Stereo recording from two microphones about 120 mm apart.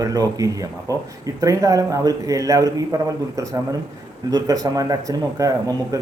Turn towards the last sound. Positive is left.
turn(degrees=-25)  # may be behind; listen again after turning